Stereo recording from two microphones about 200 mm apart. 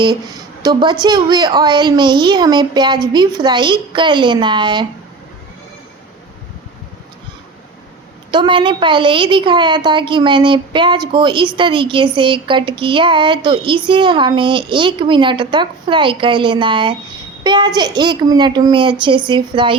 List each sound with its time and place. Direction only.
0.6 s speech: 20° right (ahead or behind)
8.3 s a child's voice: 25° right (ahead or behind)